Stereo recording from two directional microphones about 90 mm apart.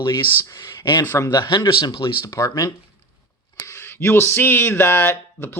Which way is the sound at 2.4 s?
40° left (ahead or behind).